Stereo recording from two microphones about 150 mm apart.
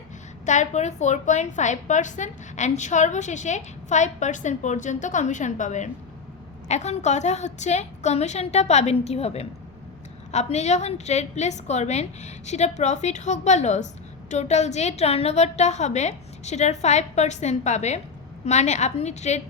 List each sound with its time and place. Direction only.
0.4 s a woman's voice: 55° left (ahead or behind)